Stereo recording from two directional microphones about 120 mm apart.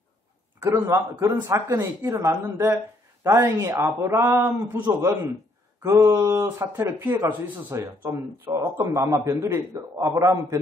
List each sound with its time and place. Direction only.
0.7 s a man's voice: 20° right (ahead or behind)
5.8 s speech: 30° right (ahead or behind)
8.5 s a man's voice: 35° right (ahead or behind)
9.0 s speech: 25° right (ahead or behind)